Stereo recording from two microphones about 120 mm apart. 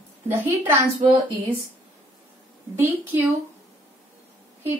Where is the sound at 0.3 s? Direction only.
20° right (ahead or behind).